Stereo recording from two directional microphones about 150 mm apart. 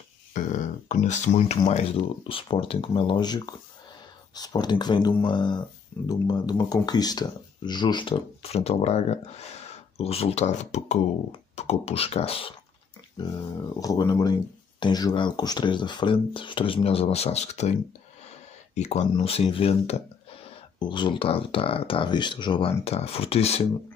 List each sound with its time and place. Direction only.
0.3 s a sound: 55° left (ahead or behind)
1.7 s speech: 45° left (ahead or behind)
13.7 s speech: 25° left (ahead or behind); by 17.7 s 50° left (ahead or behind)
18.8 s speech: 50° left (ahead or behind)
19.1 s speech: 40° left (ahead or behind)